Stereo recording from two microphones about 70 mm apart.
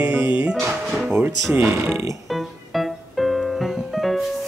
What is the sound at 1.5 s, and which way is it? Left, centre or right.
Speech, right.